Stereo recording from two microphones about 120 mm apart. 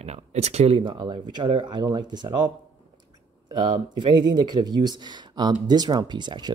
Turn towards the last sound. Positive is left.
turn(degrees=-40)  # may be behind; listen again after turning